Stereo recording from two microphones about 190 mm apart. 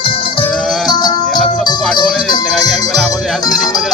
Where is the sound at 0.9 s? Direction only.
20° left (ahead or behind).